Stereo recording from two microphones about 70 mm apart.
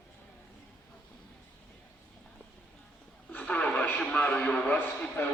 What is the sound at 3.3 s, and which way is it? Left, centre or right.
Radio, left.